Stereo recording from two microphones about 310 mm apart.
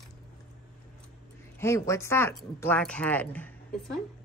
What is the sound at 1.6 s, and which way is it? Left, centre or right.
Speech, centre.